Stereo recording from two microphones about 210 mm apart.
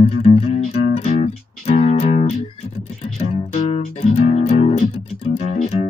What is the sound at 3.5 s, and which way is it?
Music, 30° left (ahead or behind).